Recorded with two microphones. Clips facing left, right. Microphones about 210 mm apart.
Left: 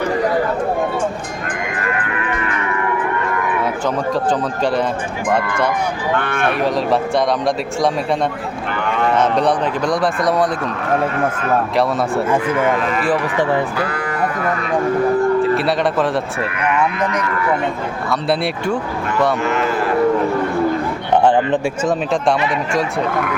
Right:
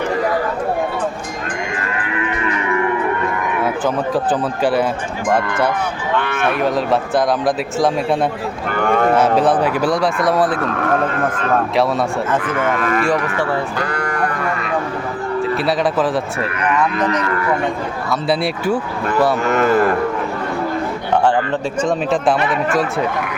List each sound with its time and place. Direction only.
3.8 s a man's voice: 5° right (ahead or behind)
6.5 s a man's voice: centre (ahead or behind)
8.7 s speech: 45° right (ahead or behind)
9.1 s a man's voice: 5° right (ahead or behind)
13.7 s sheep: 5° left (ahead or behind)
15.5 s a man's voice: centre (ahead or behind)
18.1 s a man's voice: 5° right (ahead or behind)
19.5 s speech: 45° right (ahead or behind)
21.2 s speech: 20° left (ahead or behind)
21.8 s a man's voice: centre (ahead or behind)